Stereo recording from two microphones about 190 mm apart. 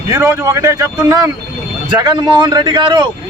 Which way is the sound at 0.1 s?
15° right (ahead or behind).